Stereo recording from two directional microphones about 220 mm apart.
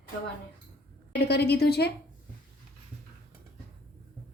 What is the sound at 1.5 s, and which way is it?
Speech, 45° left (ahead or behind).